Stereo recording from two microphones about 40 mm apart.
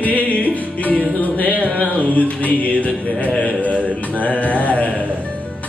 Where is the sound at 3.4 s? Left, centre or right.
Left.